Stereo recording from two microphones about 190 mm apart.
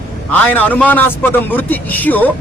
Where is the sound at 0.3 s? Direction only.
10° left (ahead or behind).